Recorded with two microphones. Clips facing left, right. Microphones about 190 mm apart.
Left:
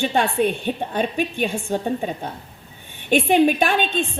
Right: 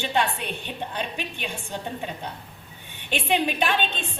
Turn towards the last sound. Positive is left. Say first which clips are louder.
# left 5 dB
turn(degrees=45)  # may be behind; listen again after turning